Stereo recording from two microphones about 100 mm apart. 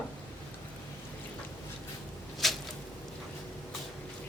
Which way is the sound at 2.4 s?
Centre (ahead or behind).